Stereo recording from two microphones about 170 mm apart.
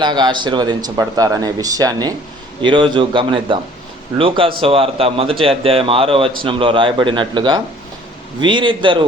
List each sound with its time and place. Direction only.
0.0 s a man's voice: 25° right (ahead or behind)